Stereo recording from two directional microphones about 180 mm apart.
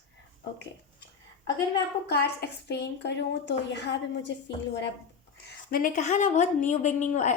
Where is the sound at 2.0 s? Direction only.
65° left (ahead or behind); by 4.9 s 85° left.